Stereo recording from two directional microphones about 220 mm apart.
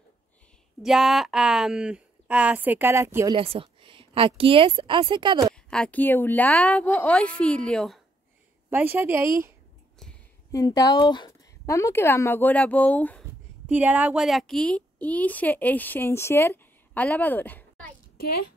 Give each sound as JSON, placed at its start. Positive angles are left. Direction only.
{"t": 0.8, "sound": "a woman's voice", "side_deg": 0}
{"t": 3.3, "sound": "a woman's voice", "side_deg": -25}
{"t": 5.5, "sound": "a woman's voice", "side_deg": 5}
{"t": 8.6, "sound": "a woman's voice", "side_deg": -10}
{"t": 10.5, "sound": "a woman's voice", "side_deg": 15}
{"t": 13.7, "sound": "a woman's voice", "side_deg": -5}